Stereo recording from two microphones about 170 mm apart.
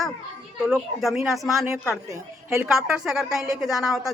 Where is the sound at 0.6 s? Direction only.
5° right (ahead or behind).